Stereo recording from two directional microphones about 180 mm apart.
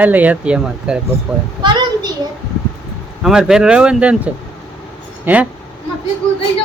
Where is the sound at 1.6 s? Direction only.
25° right (ahead or behind).